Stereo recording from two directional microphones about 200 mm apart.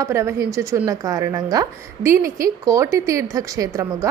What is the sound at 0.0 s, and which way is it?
A woman's voice, 15° right (ahead or behind).